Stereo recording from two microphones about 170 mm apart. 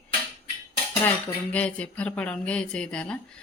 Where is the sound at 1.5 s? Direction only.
10° left (ahead or behind).